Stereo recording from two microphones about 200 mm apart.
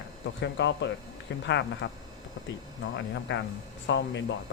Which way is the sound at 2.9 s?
65° left (ahead or behind).